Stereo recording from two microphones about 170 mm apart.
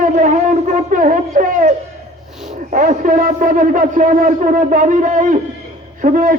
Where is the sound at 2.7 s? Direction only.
45° right (ahead or behind).